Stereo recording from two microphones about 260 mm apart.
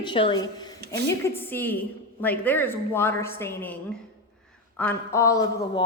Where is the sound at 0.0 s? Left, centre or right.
Centre.